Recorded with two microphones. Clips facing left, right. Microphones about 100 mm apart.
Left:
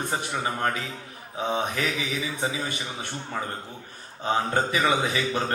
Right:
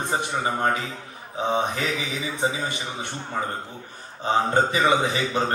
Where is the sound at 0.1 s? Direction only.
25° right (ahead or behind).